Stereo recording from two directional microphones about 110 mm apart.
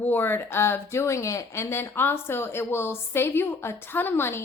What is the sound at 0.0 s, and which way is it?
Speech, 15° left (ahead or behind).